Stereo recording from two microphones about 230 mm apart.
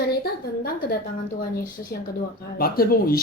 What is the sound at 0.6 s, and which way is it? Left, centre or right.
A woman's voice, left.